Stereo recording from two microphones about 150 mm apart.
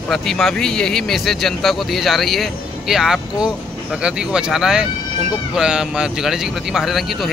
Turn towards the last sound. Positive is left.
turn(degrees=0)  # may be behind; listen again after turning